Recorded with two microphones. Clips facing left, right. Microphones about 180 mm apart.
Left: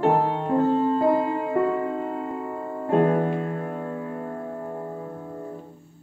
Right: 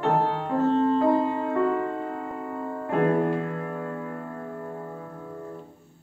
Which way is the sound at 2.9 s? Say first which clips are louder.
Left 2 dB; 30° left (ahead or behind).